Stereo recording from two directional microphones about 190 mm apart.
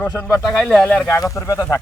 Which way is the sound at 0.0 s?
10° left (ahead or behind).